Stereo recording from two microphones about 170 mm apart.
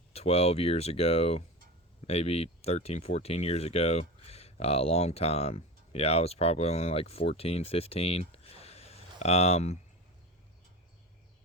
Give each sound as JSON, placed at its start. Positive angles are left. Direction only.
{"t": 0.1, "sound": "speech", "side_deg": 35}